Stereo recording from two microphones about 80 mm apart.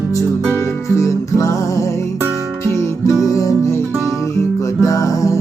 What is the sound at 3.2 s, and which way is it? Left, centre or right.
Music, left.